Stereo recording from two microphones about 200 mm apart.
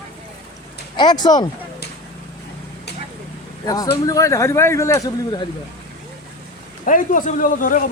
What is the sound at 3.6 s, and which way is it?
Speech, 20° left (ahead or behind).